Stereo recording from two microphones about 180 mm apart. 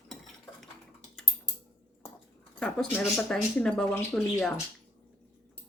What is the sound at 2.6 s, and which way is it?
Speech, centre (ahead or behind).